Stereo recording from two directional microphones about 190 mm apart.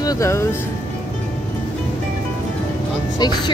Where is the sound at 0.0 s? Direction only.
20° left (ahead or behind).